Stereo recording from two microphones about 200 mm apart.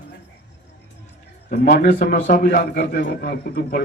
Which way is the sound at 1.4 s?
45° left (ahead or behind).